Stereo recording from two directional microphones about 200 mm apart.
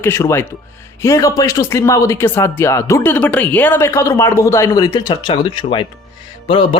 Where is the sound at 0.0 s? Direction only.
15° left (ahead or behind).